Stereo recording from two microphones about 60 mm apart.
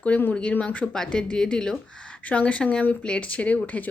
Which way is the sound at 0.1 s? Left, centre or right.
Left.